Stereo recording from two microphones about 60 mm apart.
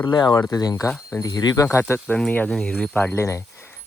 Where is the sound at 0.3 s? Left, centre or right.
Left.